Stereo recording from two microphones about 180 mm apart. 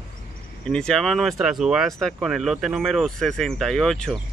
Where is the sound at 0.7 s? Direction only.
5° left (ahead or behind).